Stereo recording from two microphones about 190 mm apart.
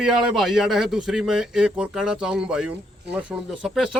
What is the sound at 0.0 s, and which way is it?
A man's voice, 5° right (ahead or behind).